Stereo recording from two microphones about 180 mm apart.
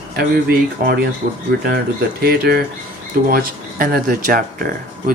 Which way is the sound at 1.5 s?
65° right (ahead or behind).